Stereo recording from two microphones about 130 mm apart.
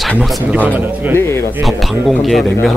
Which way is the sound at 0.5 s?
15° right (ahead or behind).